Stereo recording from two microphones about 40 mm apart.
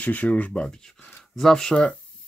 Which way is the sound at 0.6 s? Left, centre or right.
Centre.